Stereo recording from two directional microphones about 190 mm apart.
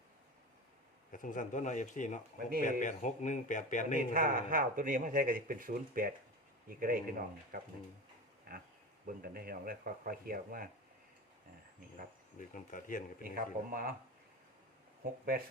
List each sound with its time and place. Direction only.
1.1 s a man's voice: 45° left (ahead or behind)
4.1 s speech: 45° right (ahead or behind)
12.4 s speech: 45° left (ahead or behind)
13.2 s speech: 50° right (ahead or behind)